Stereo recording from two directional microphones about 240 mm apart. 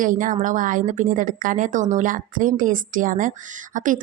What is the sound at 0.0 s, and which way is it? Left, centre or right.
Speech, right.